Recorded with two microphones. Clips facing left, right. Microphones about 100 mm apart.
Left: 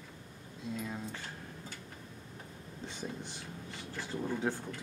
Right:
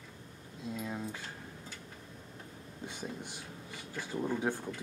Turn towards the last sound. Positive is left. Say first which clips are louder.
# right 1 dB
turn(degrees=-15)  # may be behind; listen again after turning